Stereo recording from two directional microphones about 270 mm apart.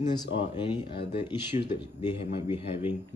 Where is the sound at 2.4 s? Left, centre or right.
Centre.